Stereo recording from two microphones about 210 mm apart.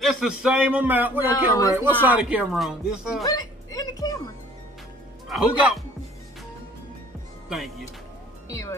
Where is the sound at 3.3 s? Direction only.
15° left (ahead or behind).